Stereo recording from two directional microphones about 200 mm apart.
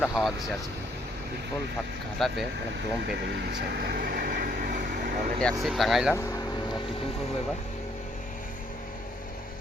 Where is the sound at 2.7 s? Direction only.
60° right (ahead or behind); by 5.1 s 40° right (ahead or behind).